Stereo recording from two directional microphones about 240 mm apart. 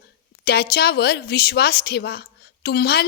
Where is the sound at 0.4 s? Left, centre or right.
Left.